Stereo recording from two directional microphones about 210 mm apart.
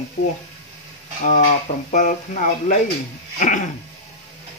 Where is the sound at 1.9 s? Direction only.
35° left (ahead or behind).